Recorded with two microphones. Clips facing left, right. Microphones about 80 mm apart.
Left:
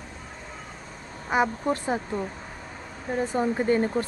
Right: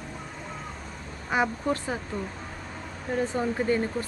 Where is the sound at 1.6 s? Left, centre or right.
Left.